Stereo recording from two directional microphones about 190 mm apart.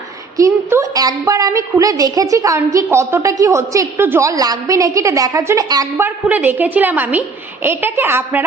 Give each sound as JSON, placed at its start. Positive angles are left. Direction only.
{"t": 0.3, "sound": "a woman's voice", "side_deg": -15}